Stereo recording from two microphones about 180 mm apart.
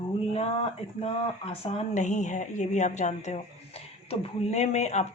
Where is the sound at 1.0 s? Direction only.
30° left (ahead or behind).